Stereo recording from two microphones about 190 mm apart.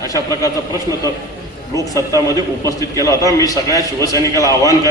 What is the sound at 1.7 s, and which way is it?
A man's voice, 15° left (ahead or behind).